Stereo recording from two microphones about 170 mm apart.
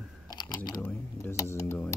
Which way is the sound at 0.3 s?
25° left (ahead or behind).